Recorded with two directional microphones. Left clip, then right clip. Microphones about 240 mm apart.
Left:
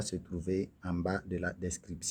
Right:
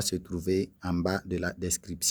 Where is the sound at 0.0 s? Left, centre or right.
Right.